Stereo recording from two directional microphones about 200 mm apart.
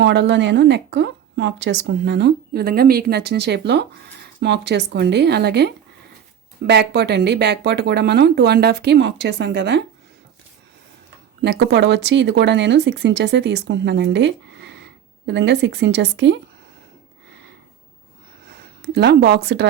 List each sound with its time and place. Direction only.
0.0 s speech: 60° right (ahead or behind)
11.4 s speech: 60° right (ahead or behind)
18.8 s speech: 55° right (ahead or behind)